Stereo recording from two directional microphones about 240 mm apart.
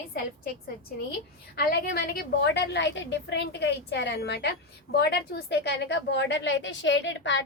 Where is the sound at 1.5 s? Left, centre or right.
Left.